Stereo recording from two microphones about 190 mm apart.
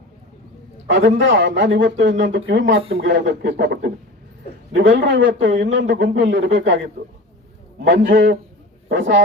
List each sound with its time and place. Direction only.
0.9 s speech: 65° right (ahead or behind)
4.7 s speech: 70° right (ahead or behind)
7.0 s a man's voice: 45° right (ahead or behind)
7.9 s speech: 70° right (ahead or behind)